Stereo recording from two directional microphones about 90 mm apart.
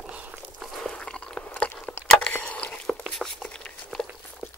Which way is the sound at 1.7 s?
20° left (ahead or behind).